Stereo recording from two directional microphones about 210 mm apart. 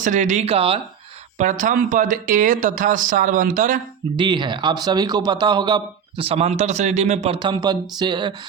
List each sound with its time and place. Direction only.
0.0 s speech: 35° right (ahead or behind)
1.4 s speech: 40° right (ahead or behind)
4.2 s speech: 20° right (ahead or behind)